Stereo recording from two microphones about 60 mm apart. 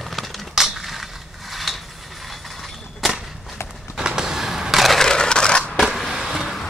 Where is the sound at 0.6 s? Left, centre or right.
Centre.